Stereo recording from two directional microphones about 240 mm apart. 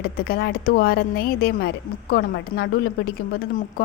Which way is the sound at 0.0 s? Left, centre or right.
Left.